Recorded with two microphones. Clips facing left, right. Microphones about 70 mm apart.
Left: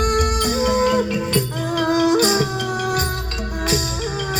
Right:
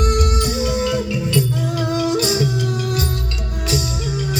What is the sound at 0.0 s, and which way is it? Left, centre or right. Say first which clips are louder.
Music: even; left.